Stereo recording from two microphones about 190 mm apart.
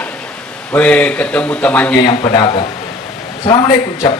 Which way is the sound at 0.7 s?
10° left (ahead or behind).